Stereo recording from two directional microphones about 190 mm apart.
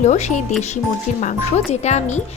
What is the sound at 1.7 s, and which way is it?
Speech, 35° left (ahead or behind).